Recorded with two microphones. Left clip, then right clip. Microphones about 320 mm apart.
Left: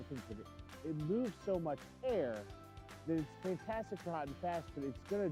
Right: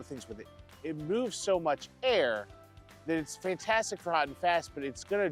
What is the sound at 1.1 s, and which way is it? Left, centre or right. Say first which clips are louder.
Speech: right 9 dB; centre.